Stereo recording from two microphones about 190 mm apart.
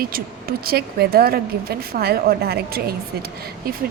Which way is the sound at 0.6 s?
55° right (ahead or behind).